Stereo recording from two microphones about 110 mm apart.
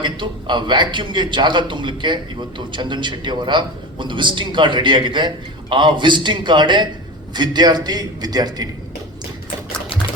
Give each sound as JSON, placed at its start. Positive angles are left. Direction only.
{"t": 0.0, "sound": "a man's voice", "side_deg": -45}